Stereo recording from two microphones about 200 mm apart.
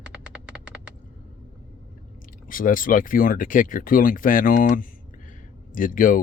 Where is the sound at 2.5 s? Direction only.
45° left (ahead or behind).